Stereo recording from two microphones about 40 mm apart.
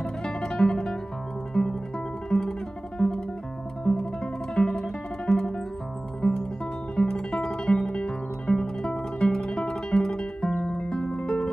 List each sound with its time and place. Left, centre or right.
0.0 s music: centre
2.2 s guitar: centre
3.0 s music: centre
6.2 s music: left
7.0 s guitar: centre
11.0 s music: centre